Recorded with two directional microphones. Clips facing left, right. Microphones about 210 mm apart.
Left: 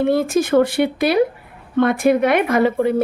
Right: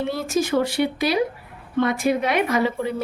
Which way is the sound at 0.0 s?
55° left (ahead or behind).